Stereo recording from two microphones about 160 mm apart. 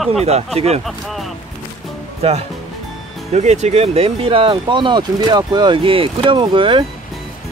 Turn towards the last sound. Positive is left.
turn(degrees=-30)  # may be behind; listen again after turning